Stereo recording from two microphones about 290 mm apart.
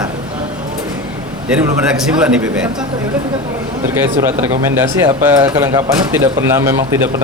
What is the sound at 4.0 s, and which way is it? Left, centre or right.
Speech, centre.